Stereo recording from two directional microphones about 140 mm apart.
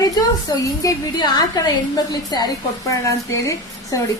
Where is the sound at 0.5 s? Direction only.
25° left (ahead or behind).